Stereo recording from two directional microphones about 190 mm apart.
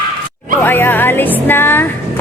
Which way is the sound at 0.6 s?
10° left (ahead or behind).